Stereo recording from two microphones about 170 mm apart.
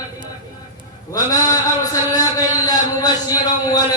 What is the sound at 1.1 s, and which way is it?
A man's voice, 20° left (ahead or behind).